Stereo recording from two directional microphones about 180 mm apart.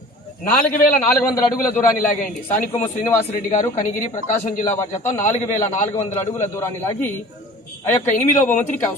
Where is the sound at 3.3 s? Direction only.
50° left (ahead or behind).